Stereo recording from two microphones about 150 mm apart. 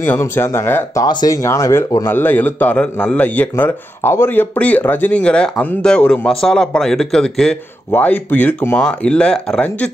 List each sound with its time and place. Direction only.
0.0 s a man's voice: 15° left (ahead or behind)
1.0 s a man's voice: 25° left (ahead or behind); by 9.8 s 5° left (ahead or behind)